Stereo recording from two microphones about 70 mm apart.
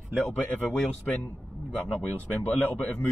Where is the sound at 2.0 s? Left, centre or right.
Left.